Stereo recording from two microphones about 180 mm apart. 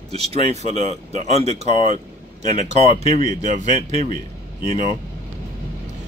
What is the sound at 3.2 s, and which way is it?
Speech, 45° right (ahead or behind).